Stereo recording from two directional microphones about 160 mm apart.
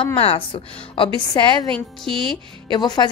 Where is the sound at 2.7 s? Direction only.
25° left (ahead or behind).